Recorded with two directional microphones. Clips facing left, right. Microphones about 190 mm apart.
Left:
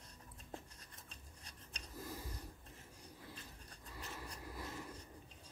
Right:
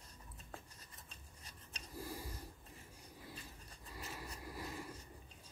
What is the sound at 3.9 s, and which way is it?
Vehicle, 10° right (ahead or behind).